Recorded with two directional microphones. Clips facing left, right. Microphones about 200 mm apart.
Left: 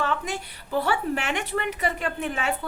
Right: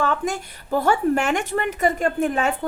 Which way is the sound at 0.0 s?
45° right (ahead or behind).